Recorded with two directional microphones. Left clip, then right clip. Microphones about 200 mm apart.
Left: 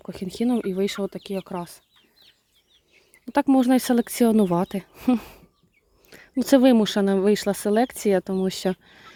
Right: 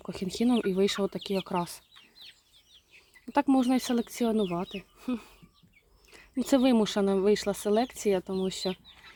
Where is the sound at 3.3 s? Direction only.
20° left (ahead or behind); by 5.3 s 40° left (ahead or behind).